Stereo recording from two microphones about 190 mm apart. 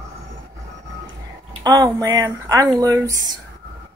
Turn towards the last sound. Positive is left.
turn(degrees=-20)  # may be behind; listen again after turning